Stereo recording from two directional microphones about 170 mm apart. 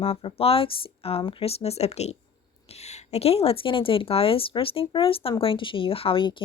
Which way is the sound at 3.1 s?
35° left (ahead or behind).